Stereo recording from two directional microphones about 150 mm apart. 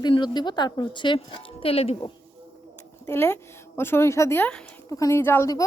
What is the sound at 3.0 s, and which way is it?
Speech, 15° left (ahead or behind).